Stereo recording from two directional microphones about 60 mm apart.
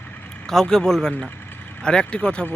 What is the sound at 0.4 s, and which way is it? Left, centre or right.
Speech, centre.